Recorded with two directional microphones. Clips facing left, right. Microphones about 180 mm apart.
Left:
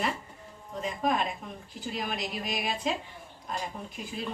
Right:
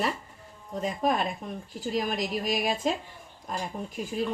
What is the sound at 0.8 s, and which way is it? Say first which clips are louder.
A woman's voice: right 2 dB; 40° right (ahead or behind).